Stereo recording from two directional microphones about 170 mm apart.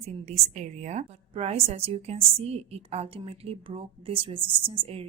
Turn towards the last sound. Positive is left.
turn(degrees=-35)  # may be behind; listen again after turning